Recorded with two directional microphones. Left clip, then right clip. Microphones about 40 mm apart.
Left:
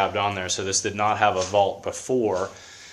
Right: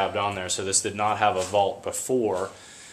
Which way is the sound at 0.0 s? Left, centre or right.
Left.